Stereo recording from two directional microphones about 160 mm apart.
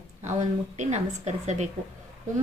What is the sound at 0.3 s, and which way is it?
A woman's voice, 45° right (ahead or behind).